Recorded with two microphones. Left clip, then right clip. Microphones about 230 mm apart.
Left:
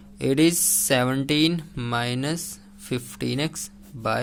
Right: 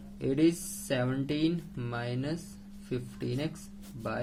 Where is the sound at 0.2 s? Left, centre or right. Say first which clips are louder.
Left 7 dB; left.